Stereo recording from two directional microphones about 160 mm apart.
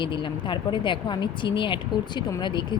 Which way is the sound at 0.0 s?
30° left (ahead or behind).